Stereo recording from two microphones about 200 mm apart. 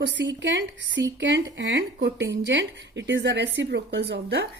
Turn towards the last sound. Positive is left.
turn(degrees=-60)  # may be behind; listen again after turning